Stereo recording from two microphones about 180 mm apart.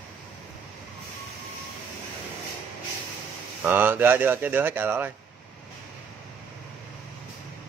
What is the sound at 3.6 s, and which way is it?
Speech, 10° right (ahead or behind).